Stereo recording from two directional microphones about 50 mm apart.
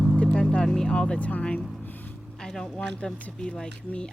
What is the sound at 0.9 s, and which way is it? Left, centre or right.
Speech, left.